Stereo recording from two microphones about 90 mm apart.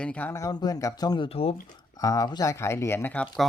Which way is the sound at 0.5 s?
45° left (ahead or behind).